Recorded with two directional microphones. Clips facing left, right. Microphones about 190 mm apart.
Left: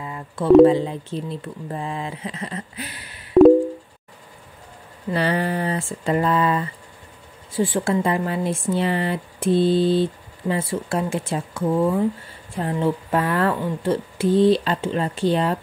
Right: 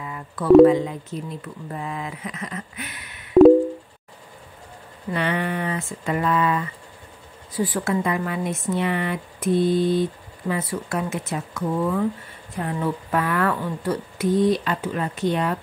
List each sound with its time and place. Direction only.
0.0 s a sound: 30° left (ahead or behind)
0.7 s speech: 30° left (ahead or behind)
5.1 s speech: 35° left (ahead or behind)